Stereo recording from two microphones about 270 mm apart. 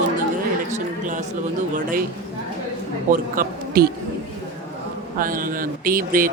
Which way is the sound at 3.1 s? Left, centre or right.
Right.